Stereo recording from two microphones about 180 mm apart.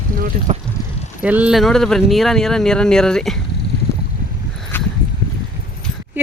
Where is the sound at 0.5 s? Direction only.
35° right (ahead or behind).